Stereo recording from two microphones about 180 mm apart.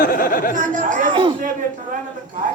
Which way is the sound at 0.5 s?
45° right (ahead or behind).